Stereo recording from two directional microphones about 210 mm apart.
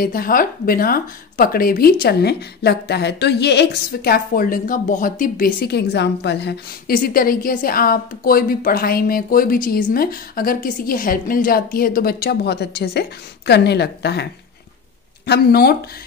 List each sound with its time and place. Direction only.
0.0 s speech: 45° left (ahead or behind)